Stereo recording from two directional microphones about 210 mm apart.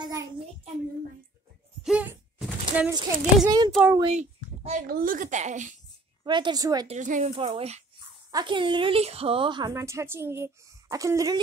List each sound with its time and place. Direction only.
0.0 s child singing: 15° right (ahead or behind)
1.8 s a sound: 5° right (ahead or behind)
2.9 s a woman's voice: 20° right (ahead or behind)
3.7 s a woman's voice: 5° right (ahead or behind)
4.0 s speech: 30° right (ahead or behind)
6.2 s a woman's voice: 20° right (ahead or behind)
6.9 s speech: 35° right (ahead or behind)
7.3 s a woman's voice: 25° right (ahead or behind)